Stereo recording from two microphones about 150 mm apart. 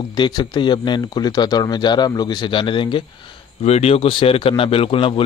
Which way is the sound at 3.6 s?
45° left (ahead or behind).